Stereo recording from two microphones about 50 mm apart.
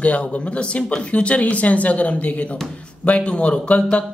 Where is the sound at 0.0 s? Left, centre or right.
Left.